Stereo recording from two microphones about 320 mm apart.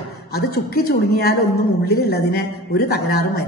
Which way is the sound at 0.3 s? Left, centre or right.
Left.